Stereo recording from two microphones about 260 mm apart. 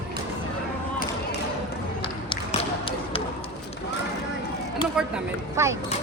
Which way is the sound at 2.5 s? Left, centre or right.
Left.